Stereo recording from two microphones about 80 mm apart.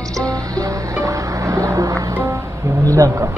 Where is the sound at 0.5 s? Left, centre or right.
Right.